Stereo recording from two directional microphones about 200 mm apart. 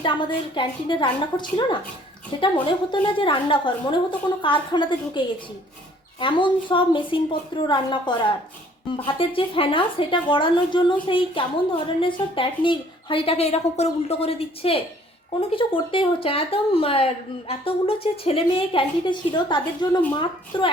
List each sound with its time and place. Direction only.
0.0 s a woman's voice: 25° left (ahead or behind)
9.1 s a woman's voice: 25° left (ahead or behind)